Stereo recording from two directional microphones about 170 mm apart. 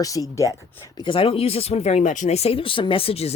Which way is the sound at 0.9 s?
30° left (ahead or behind).